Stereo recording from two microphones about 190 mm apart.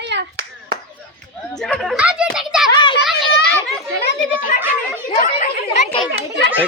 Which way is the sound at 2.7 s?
25° left (ahead or behind).